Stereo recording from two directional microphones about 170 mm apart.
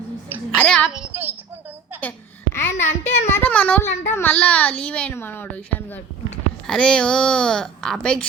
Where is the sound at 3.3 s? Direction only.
10° left (ahead or behind).